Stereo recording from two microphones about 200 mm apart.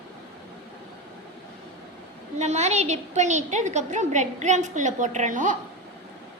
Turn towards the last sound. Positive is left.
turn(degrees=-40)  # may be behind; listen again after turning